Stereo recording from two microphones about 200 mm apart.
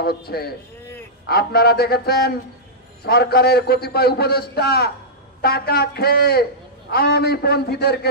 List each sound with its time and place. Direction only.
0.0 s a man's voice: 50° left (ahead or behind)